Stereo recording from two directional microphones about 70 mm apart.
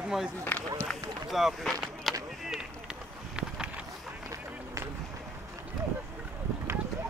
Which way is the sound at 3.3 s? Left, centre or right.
Centre.